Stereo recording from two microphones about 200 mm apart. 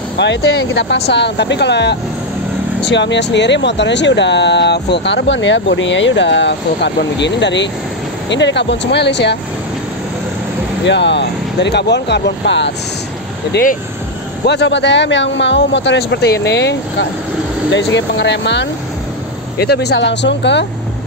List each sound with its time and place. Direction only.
0.2 s speech: 60° left (ahead or behind)
10.9 s speech: 60° left (ahead or behind)
13.5 s speech: 45° left (ahead or behind)
14.4 s speech: 60° left (ahead or behind)